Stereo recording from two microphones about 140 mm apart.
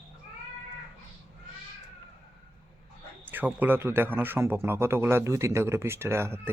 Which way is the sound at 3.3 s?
15° right (ahead or behind).